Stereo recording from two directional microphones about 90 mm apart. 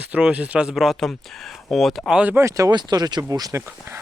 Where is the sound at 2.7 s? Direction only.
50° right (ahead or behind).